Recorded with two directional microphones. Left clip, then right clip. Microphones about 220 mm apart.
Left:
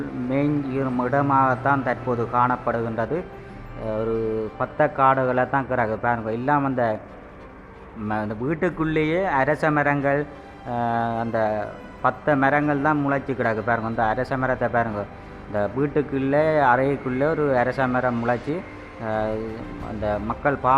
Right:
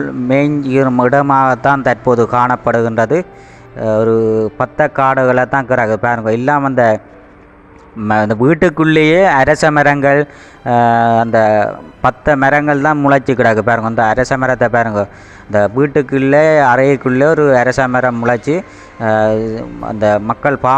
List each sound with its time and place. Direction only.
0.3 s speech: 30° right (ahead or behind)
3.8 s mantra: 30° right (ahead or behind)
8.0 s speech: 35° right (ahead or behind)
15.5 s mantra: 30° right (ahead or behind)